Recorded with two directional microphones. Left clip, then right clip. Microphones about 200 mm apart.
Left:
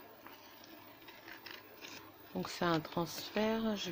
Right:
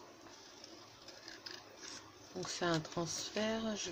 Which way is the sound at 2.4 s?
35° left (ahead or behind).